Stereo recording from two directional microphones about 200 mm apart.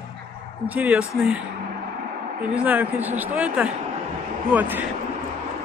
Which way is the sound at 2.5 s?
10° right (ahead or behind).